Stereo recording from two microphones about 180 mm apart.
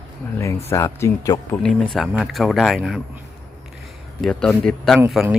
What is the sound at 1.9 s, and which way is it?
Speech, centre (ahead or behind).